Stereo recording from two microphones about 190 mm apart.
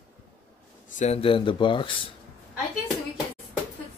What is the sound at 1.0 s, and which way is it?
Speech, 30° left (ahead or behind).